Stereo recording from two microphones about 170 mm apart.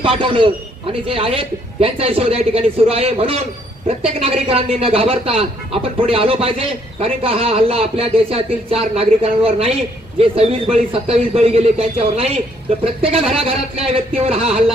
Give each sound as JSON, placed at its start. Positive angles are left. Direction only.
{"t": 0.0, "sound": "a man's voice", "side_deg": -30}